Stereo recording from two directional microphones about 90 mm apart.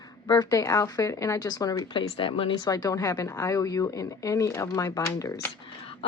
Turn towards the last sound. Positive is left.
turn(degrees=40)  # may be behind; listen again after turning